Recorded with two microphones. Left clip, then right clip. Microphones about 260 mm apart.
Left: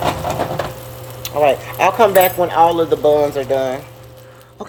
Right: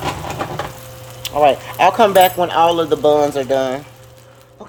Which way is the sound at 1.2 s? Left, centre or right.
Right.